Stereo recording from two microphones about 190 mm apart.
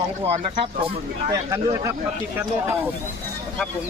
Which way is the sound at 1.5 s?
15° right (ahead or behind).